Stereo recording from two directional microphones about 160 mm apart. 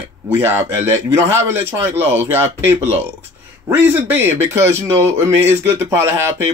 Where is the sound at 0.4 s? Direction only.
15° right (ahead or behind).